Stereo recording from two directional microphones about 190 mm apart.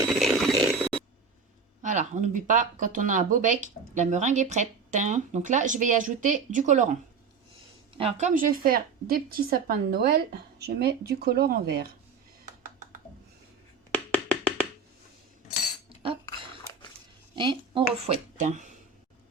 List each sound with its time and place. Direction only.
0.1 s a sound: centre (ahead or behind)
1.8 s speech: 40° right (ahead or behind)
7.9 s speech: 30° right (ahead or behind)
8.3 s a woman's voice: 45° right (ahead or behind)
13.9 s music: 10° left (ahead or behind)
16.0 s a sound: 25° right (ahead or behind)
17.3 s a woman's voice: 25° right (ahead or behind)
18.3 s speech: 40° right (ahead or behind)